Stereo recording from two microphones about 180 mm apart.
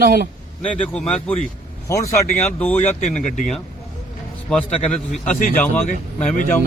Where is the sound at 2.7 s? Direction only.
40° left (ahead or behind).